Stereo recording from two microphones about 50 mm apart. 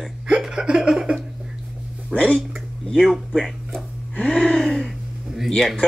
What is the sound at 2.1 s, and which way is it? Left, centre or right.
Speech, right.